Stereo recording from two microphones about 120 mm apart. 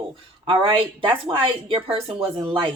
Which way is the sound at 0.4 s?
45° right (ahead or behind).